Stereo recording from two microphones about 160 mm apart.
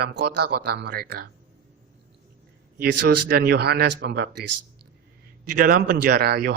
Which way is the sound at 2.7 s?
90° right.